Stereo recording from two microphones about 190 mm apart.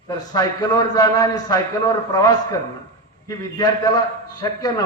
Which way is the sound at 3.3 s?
20° left (ahead or behind).